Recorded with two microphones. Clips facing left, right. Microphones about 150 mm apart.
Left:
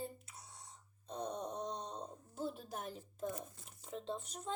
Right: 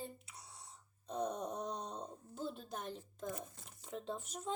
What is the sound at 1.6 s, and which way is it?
A child's voice, 5° right (ahead or behind).